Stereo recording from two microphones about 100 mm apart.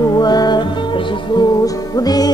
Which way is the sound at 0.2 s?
45° left (ahead or behind).